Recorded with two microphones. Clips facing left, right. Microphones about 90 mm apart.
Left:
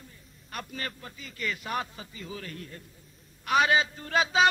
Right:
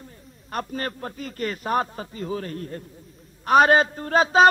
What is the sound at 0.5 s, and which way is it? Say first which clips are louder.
A man's voice: right 8 dB; 45° right (ahead or behind).